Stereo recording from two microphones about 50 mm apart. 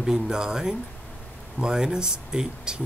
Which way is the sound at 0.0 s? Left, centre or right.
Centre.